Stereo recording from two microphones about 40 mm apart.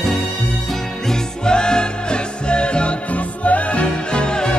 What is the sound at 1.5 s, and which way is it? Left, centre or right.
Music, left.